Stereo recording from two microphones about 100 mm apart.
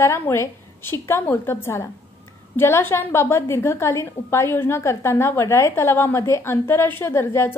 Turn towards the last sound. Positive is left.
turn(degrees=25)  # may be behind; listen again after turning